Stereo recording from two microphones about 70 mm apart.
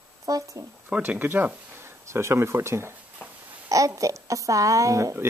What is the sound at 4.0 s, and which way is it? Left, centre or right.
Speech, right.